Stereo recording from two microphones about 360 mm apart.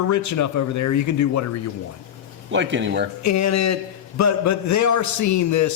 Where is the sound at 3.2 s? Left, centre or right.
Left.